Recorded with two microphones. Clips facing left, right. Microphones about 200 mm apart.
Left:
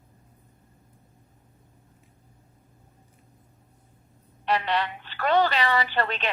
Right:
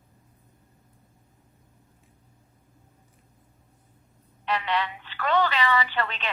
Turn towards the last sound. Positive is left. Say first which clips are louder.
# left 2 dB
turn(degrees=40)  # may be behind; listen again after turning